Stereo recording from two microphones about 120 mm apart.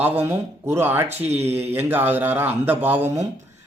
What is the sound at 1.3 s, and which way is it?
Speech, 60° right (ahead or behind).